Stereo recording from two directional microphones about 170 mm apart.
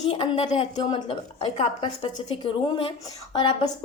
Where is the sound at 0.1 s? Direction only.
35° left (ahead or behind).